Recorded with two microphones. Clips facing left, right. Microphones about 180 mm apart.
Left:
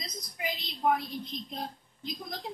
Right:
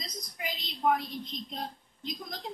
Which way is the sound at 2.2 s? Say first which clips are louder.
Left 1 dB; centre (ahead or behind).